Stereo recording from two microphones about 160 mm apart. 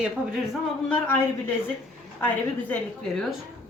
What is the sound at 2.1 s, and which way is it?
Speech, 10° left (ahead or behind).